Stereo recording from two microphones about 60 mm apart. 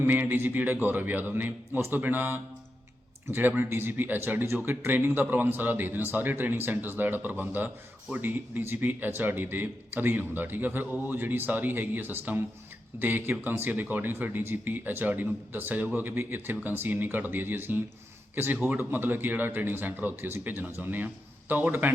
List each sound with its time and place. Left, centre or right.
0.0 s speech: right